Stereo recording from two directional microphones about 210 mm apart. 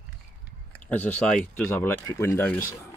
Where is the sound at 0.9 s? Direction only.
10° left (ahead or behind).